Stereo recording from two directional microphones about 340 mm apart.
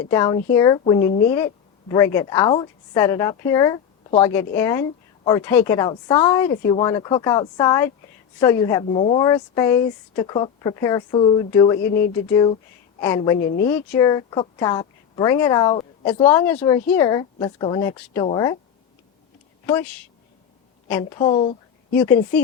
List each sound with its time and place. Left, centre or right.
0.1 s a woman's voice: centre
11.8 s speech: left
12.3 s a woman's voice: centre
13.4 s speech: left
13.7 s a woman's voice: centre
21.0 s a woman's voice: centre